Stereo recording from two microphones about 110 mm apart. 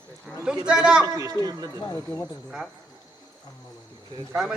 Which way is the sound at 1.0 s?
35° right (ahead or behind).